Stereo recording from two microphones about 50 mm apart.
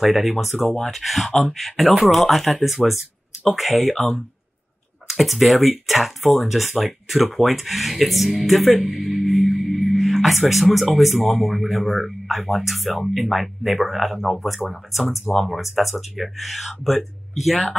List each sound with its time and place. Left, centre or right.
0.0 s speech: centre
8.7 s speech: centre
9.0 s speech: centre